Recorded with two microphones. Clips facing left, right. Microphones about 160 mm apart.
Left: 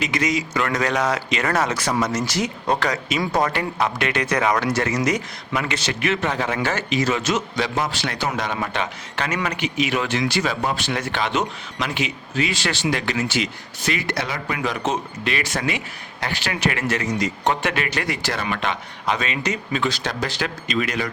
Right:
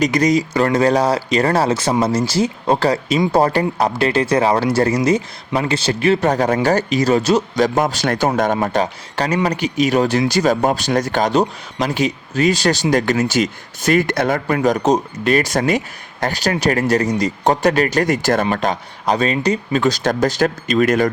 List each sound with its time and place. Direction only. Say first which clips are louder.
0.0 s speech: right 8 dB; 40° right (ahead or behind)